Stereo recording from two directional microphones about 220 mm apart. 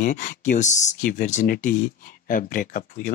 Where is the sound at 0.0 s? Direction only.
35° left (ahead or behind).